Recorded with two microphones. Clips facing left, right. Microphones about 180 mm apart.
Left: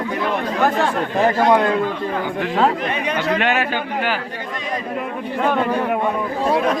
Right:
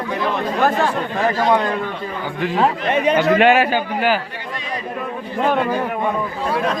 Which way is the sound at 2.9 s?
50° right (ahead or behind).